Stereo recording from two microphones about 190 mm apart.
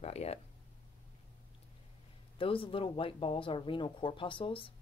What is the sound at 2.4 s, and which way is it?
Speech, 30° left (ahead or behind).